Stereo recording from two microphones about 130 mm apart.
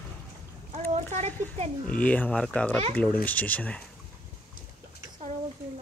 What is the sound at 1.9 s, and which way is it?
Speech, 10° left (ahead or behind).